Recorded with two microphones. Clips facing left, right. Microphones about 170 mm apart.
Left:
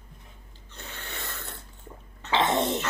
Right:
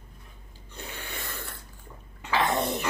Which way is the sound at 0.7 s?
10° right (ahead or behind).